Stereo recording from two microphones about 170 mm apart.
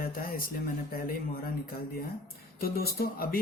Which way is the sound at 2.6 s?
65° left (ahead or behind).